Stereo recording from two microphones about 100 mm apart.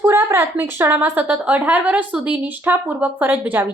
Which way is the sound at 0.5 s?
20° right (ahead or behind).